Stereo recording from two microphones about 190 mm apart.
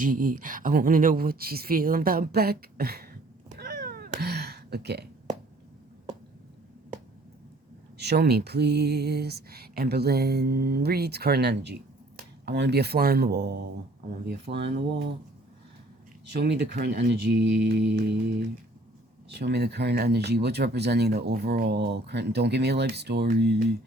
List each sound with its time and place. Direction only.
0.0 s speech: 45° right (ahead or behind)
3.5 s cat: 55° right (ahead or behind)
7.9 s speech: 60° right (ahead or behind)
16.4 s speech: 60° right (ahead or behind)
19.3 s speech: 60° right (ahead or behind)